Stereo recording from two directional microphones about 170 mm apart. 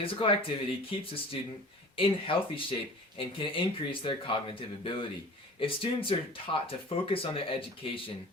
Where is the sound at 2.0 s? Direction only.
30° left (ahead or behind).